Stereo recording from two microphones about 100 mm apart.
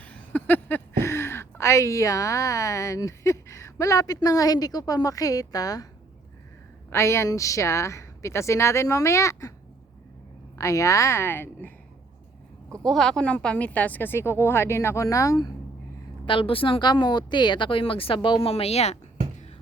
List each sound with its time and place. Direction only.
0.0 s speech: 15° left (ahead or behind); by 5.9 s 35° left (ahead or behind)
6.9 s speech: 30° left (ahead or behind)
10.6 s a woman's voice: 30° left (ahead or behind)
12.8 s speech: 5° left (ahead or behind); by 15.5 s 40° left (ahead or behind)
16.2 s speech: 60° left (ahead or behind); by 18.9 s 90° left